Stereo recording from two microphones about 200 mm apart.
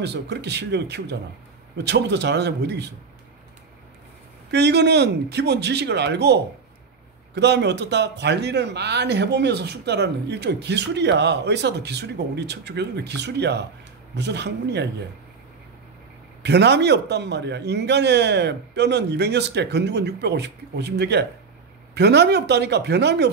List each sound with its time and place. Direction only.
0.0 s speech: 60° right (ahead or behind)
4.5 s speech: 55° right (ahead or behind)
16.4 s speech: 60° right (ahead or behind)